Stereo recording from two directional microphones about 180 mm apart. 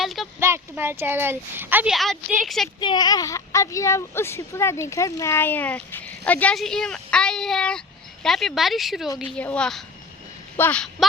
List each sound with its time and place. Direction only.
0.0 s a sound: centre (ahead or behind)
0.3 s speech: 15° right (ahead or behind)
2.8 s a woman's voice: 25° left (ahead or behind); by 10.8 s 5° left (ahead or behind)